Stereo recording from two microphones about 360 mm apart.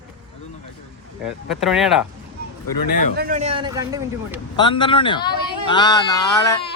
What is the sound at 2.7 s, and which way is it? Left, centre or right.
Speech, left.